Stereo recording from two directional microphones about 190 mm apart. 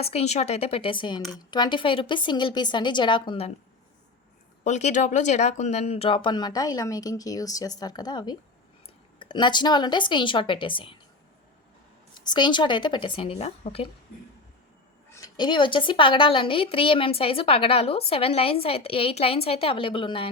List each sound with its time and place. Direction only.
0.0 s a woman's voice: 35° left (ahead or behind)
4.6 s a woman's voice: 40° left (ahead or behind)
12.3 s a woman's voice: 25° left (ahead or behind)
15.1 s a woman's voice: 20° left (ahead or behind)